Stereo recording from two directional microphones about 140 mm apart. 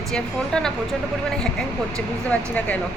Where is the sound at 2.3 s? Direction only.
10° left (ahead or behind).